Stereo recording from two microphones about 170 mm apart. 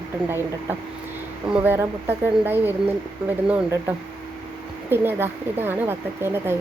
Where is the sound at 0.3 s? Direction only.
15° right (ahead or behind).